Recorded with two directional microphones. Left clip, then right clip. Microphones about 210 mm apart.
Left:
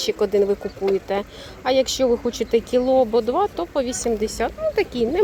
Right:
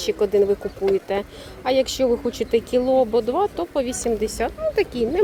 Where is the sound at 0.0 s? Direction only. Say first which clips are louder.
Even; 5° right (ahead or behind).